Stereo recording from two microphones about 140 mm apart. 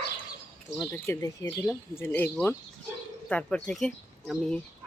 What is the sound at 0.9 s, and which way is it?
Speech, 20° left (ahead or behind).